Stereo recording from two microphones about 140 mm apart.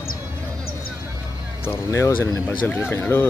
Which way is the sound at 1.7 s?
20° left (ahead or behind).